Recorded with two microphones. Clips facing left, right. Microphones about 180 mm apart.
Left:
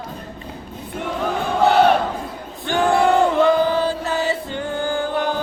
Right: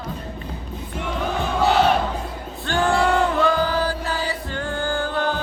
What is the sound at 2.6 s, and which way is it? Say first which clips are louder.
Chant: left 3 dB; 20° left (ahead or behind).